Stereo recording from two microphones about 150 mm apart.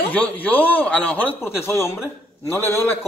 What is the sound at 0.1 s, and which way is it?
A man's voice, 10° left (ahead or behind).